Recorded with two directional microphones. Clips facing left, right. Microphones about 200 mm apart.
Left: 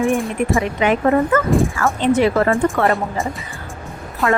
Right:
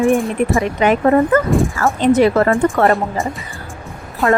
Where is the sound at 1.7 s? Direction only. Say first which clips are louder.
Right 3 dB; 40° right (ahead or behind).